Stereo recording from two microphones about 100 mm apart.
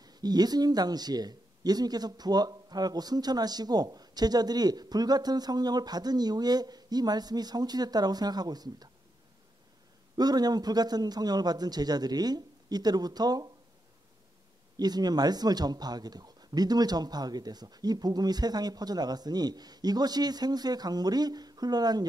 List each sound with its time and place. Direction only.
0.0 s speech: 40° right (ahead or behind)
10.1 s speech: 40° right (ahead or behind)
14.8 s speech: 40° right (ahead or behind)